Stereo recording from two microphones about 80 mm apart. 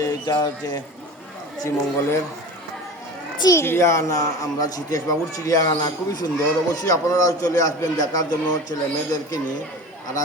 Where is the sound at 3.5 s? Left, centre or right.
Left.